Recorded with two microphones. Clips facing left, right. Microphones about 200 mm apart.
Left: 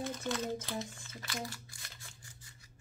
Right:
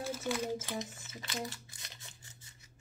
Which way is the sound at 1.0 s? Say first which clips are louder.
Right 1 dB; 20° right (ahead or behind).